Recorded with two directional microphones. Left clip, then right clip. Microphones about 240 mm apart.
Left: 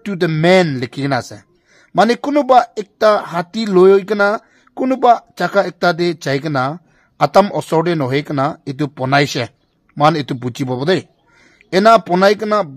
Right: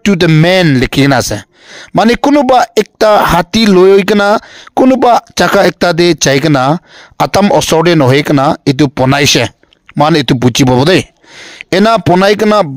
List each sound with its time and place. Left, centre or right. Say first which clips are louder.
0.0 s speech: right 7 dB; right